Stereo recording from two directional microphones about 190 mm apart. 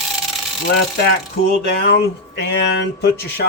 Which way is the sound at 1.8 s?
65° left (ahead or behind).